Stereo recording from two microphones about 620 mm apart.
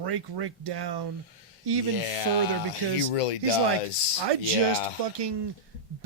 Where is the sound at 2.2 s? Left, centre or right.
Left.